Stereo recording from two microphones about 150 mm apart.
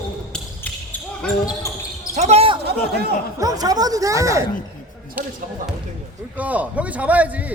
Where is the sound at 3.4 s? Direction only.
25° right (ahead or behind).